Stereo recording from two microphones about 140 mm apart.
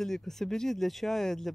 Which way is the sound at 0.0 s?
5° left (ahead or behind).